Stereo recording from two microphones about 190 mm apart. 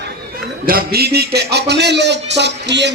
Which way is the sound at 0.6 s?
55° right (ahead or behind).